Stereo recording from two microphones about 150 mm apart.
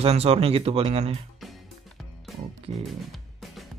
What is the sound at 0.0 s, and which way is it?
Speech, 40° right (ahead or behind).